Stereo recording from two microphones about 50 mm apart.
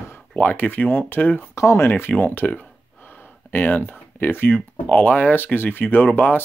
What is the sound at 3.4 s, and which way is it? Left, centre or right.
Speech, left.